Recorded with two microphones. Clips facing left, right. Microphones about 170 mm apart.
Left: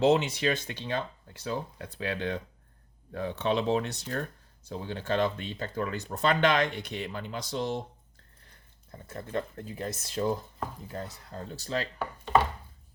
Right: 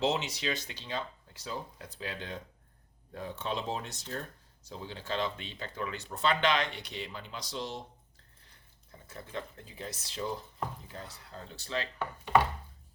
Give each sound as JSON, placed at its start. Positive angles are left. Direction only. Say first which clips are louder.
{"t": 0.0, "sound": "speech", "louder": "left 7 dB", "side_deg": 55}
{"t": 8.9, "sound": "speech", "louder": "left 8 dB", "side_deg": 50}